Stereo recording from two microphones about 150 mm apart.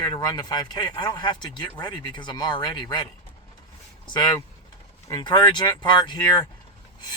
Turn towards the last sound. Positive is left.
turn(degrees=30)  # may be behind; listen again after turning